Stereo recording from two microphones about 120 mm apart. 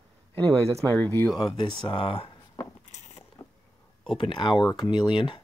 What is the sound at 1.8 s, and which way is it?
Speech, 45° left (ahead or behind).